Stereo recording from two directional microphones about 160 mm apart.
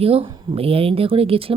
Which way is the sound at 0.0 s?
35° right (ahead or behind).